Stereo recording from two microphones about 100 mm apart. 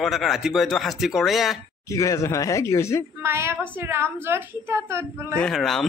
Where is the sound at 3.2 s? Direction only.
25° right (ahead or behind).